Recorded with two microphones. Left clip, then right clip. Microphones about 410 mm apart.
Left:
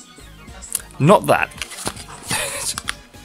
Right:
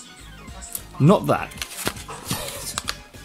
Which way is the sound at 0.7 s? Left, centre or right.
Centre.